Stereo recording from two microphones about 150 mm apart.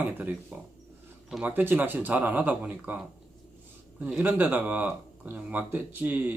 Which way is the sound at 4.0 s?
5° right (ahead or behind).